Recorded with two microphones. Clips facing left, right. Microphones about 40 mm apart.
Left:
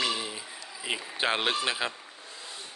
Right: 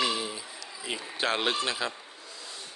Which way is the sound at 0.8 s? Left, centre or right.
Centre.